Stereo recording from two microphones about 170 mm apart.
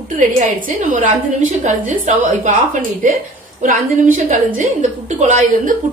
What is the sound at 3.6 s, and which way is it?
A woman's voice, 45° right (ahead or behind).